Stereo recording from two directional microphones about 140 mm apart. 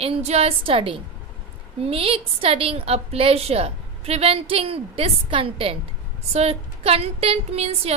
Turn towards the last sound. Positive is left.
turn(degrees=-50)  # may be behind; listen again after turning